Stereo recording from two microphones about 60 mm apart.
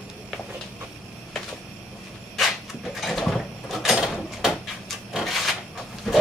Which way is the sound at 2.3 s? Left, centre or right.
Centre.